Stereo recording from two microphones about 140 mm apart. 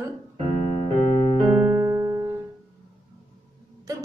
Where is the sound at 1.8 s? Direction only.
20° right (ahead or behind).